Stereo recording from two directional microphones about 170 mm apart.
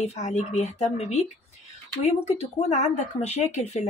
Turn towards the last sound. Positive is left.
turn(degrees=40)  # may be behind; listen again after turning